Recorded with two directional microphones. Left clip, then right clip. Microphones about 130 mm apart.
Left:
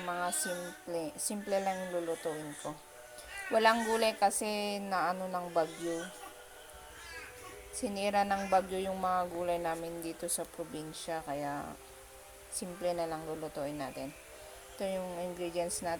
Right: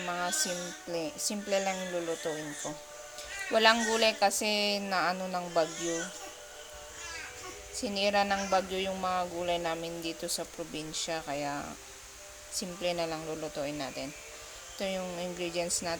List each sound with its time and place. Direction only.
0.0 s speech: 10° left (ahead or behind)
1.7 s speech: centre (ahead or behind)
3.5 s speech: 15° left (ahead or behind)
7.8 s speech: 20° left (ahead or behind)